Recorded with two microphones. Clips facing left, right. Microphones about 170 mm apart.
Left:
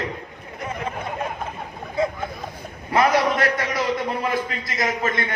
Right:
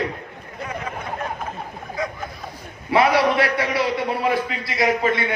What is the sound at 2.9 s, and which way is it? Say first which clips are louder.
A man's voice: right 2 dB; 45° left (ahead or behind).